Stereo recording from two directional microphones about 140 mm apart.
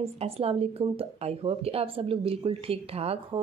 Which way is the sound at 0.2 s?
45° right (ahead or behind).